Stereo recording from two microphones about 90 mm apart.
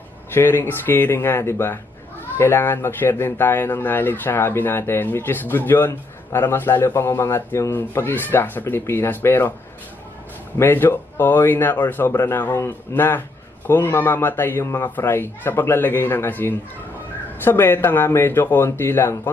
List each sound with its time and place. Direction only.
0.3 s speech: 25° left (ahead or behind)
10.6 s speech: 25° left (ahead or behind)